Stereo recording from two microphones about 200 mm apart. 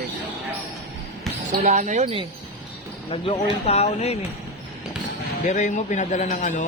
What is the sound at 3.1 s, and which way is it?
Speech, 30° left (ahead or behind).